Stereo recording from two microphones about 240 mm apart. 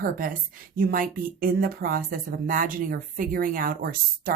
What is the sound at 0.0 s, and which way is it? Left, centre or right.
Speech, right.